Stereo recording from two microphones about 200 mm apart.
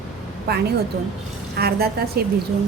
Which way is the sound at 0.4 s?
55° right (ahead or behind).